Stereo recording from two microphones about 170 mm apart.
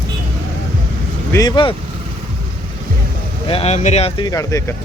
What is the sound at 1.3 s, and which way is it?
Speech, 20° left (ahead or behind).